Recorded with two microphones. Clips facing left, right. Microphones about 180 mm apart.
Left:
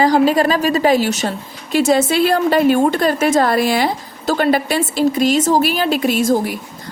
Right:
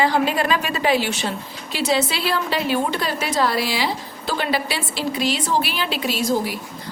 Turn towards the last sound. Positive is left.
turn(degrees=50)  # may be behind; listen again after turning